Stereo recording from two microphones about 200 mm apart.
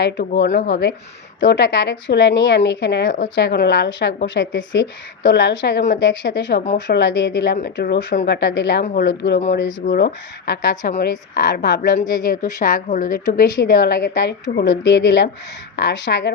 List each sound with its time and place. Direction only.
0.0 s speech: 60° left (ahead or behind)
12.2 s a woman's voice: 45° left (ahead or behind); by 16.3 s 60° left (ahead or behind)